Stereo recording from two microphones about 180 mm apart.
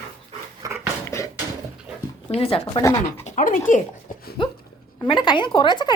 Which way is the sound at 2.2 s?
30° left (ahead or behind).